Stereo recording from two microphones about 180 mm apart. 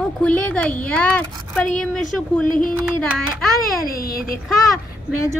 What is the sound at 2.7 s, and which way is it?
Speech, 5° left (ahead or behind).